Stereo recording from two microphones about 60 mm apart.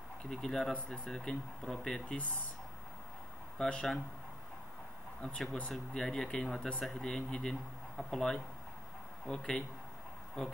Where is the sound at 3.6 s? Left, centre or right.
Centre.